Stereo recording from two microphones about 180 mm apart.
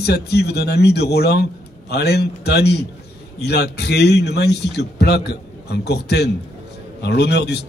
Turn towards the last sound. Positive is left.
turn(degrees=65)  # may be behind; listen again after turning